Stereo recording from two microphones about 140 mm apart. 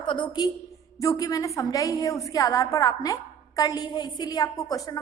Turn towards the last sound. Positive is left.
turn(degrees=30)  # may be behind; listen again after turning